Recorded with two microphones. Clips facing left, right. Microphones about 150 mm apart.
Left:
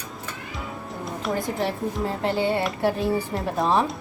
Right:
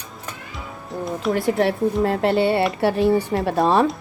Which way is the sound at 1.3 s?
70° right (ahead or behind).